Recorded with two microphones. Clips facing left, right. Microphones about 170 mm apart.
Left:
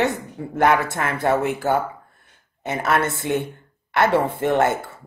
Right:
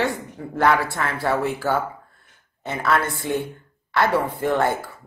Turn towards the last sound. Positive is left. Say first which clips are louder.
# left 2 dB
turn(degrees=20)  # may be behind; listen again after turning